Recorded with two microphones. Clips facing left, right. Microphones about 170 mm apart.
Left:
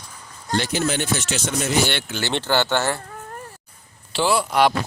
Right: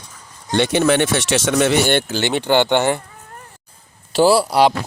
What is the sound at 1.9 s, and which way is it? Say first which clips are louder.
Speech: right 9 dB; 50° right (ahead or behind).